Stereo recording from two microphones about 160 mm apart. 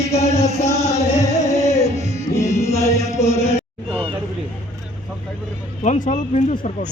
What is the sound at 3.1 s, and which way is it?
Chant, 20° left (ahead or behind).